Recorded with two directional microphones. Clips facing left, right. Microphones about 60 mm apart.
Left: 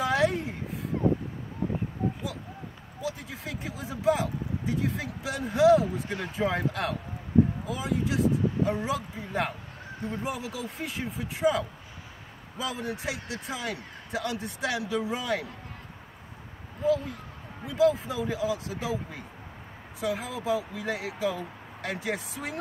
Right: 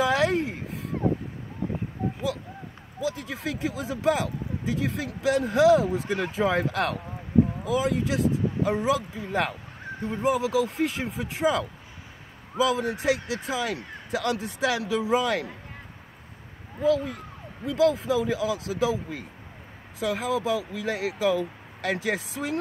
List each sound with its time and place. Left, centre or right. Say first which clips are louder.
0.0 s a sound: right 3 dB; right
3.0 s speech: right 5 dB; right
17.6 s speech: right 2 dB; right